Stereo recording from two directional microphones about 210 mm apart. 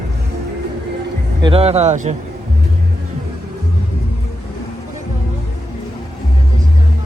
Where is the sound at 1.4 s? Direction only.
25° right (ahead or behind).